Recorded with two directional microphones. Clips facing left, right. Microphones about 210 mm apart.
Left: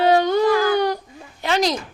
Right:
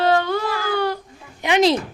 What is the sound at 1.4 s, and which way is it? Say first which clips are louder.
Speech: right 2 dB; 15° right (ahead or behind).